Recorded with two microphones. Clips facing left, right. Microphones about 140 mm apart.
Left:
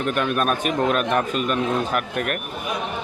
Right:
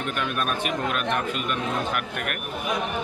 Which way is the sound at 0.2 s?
45° left (ahead or behind).